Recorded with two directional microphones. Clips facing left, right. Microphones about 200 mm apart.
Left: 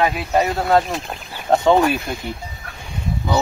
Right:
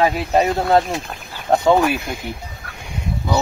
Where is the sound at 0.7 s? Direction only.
10° right (ahead or behind).